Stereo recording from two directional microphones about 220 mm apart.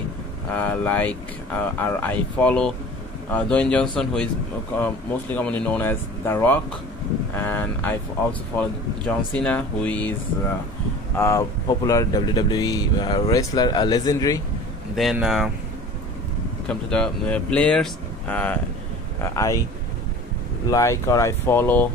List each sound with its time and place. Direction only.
0.5 s speech: 10° left (ahead or behind)
11.1 s speech: 15° left (ahead or behind)
15.0 s speech: centre (ahead or behind)
16.6 s speech: 5° left (ahead or behind)
20.7 s speech: 15° left (ahead or behind)